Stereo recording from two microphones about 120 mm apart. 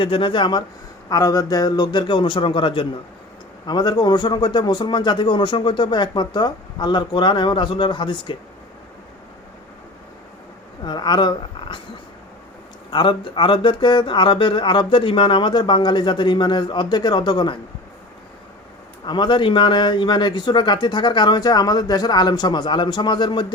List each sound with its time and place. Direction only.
0.0 s speech: 45° left (ahead or behind)
1.1 s speech: 30° left (ahead or behind)
10.8 s speech: 35° left (ahead or behind)
12.9 s speech: 40° left (ahead or behind)
19.0 s speech: 40° left (ahead or behind)